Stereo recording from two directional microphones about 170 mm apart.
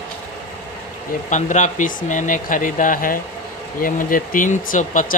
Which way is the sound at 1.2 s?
45° left (ahead or behind).